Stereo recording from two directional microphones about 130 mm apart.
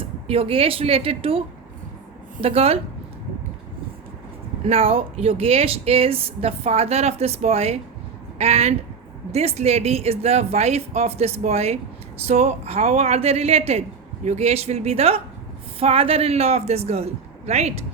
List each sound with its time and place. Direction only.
0.0 s speech: 45° right (ahead or behind)
4.6 s speech: 50° right (ahead or behind)